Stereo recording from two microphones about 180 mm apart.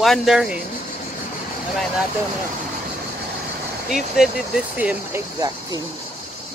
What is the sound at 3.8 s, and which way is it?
Speech, centre (ahead or behind).